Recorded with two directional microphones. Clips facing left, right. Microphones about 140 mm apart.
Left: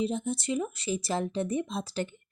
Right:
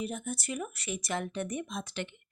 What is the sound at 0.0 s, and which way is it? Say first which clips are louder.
Speech: left 6 dB; 25° left (ahead or behind).